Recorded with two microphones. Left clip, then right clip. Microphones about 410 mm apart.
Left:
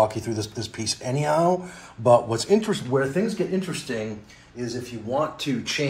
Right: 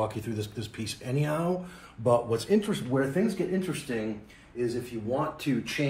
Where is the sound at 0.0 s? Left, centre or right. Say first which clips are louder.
Left 9 dB; centre.